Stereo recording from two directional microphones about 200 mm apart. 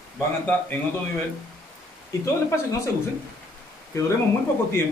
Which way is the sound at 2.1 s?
15° left (ahead or behind).